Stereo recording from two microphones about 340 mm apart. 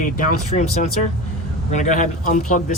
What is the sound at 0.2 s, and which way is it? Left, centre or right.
Speech, left.